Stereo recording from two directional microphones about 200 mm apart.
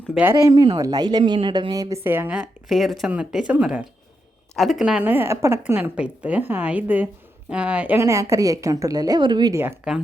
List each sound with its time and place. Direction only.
0.1 s a woman's voice: 10° right (ahead or behind)